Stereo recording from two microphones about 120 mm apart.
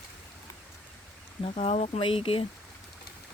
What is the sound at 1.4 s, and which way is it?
Speech, 60° left (ahead or behind).